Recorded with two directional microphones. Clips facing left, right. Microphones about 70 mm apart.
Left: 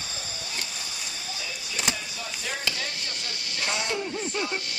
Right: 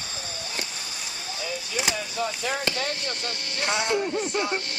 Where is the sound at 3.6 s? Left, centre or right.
Right.